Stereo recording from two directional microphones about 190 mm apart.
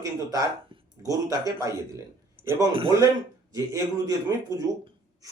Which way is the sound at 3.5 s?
20° right (ahead or behind).